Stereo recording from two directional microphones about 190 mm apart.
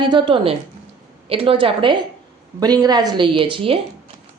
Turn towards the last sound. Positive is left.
turn(degrees=-30)  # may be behind; listen again after turning